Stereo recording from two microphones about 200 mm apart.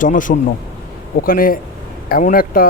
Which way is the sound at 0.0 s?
40° left (ahead or behind).